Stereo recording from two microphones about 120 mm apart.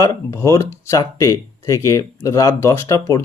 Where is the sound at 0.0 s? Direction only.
25° left (ahead or behind).